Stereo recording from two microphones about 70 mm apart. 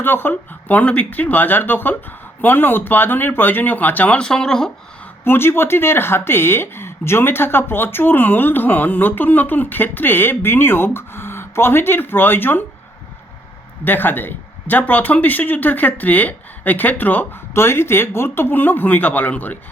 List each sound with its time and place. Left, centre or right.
0.0 s speech: left
4.3 s speech: centre
5.2 s speech: left
13.8 s speech: left
17.5 s speech: left